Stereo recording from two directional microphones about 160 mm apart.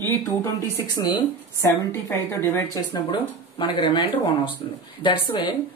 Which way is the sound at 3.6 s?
30° left (ahead or behind).